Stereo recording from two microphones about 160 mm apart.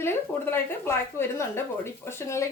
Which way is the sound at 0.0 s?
15° left (ahead or behind).